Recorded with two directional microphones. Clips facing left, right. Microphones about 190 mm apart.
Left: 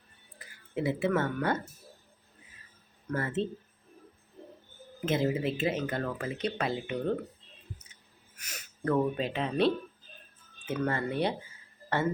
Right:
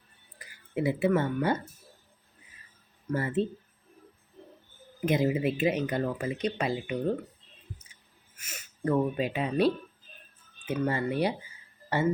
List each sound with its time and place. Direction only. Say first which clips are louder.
0.3 s speech: right 2 dB; 15° right (ahead or behind)
3.1 s speech: right 3 dB; 10° right (ahead or behind)
5.0 s speech: right 3 dB; 15° right (ahead or behind)
6.4 s speech: even; centre (ahead or behind)
8.4 s speech: right 3 dB; 5° right (ahead or behind)